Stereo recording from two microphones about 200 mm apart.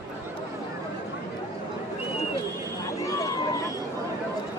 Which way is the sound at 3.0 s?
15° left (ahead or behind).